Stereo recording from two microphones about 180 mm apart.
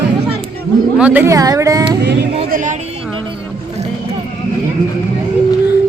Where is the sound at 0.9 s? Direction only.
10° right (ahead or behind).